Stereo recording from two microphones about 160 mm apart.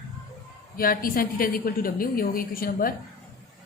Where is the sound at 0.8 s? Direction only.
65° left (ahead or behind).